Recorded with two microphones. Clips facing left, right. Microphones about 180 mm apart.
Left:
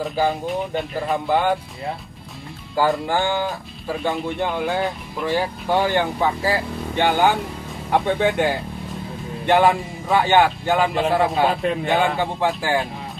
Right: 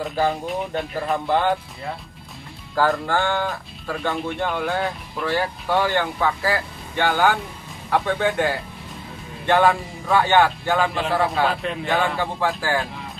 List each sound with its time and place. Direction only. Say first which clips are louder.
0.0 s speech: left 1 dB; centre (ahead or behind)
2.7 s speech: left 1 dB; 15° left (ahead or behind)